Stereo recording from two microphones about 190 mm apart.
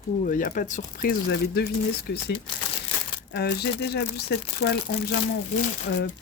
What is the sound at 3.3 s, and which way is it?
Speech, 60° left (ahead or behind).